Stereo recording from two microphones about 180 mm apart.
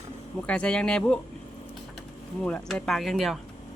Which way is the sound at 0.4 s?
5° left (ahead or behind).